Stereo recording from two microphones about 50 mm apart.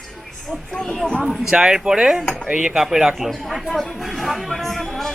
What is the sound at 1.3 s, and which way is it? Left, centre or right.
A man's voice, centre.